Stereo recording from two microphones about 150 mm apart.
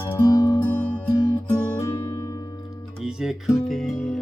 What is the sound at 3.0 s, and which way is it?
Music, 5° right (ahead or behind).